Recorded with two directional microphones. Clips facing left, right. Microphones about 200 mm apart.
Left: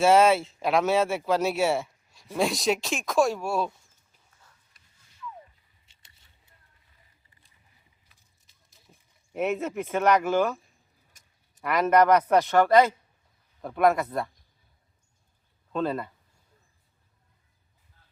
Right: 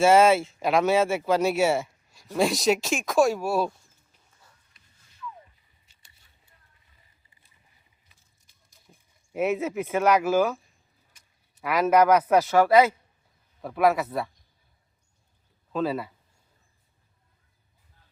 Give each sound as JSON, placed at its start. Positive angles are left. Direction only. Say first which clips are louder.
{"t": 0.0, "sound": "a man's voice", "louder": "right 1 dB", "side_deg": 0}
{"t": 5.8, "sound": "biting", "louder": "left 1 dB", "side_deg": 25}
{"t": 8.7, "sound": "speech", "louder": "right 1 dB", "side_deg": 0}
{"t": 11.1, "sound": "a sound", "louder": "even", "side_deg": 45}
{"t": 11.6, "sound": "a man's voice", "louder": "right 1 dB", "side_deg": -5}
{"t": 15.7, "sound": "speech", "louder": "right 1 dB", "side_deg": -5}